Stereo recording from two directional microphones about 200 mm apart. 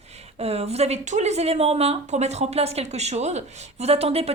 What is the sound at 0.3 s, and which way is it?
Speech, 30° right (ahead or behind).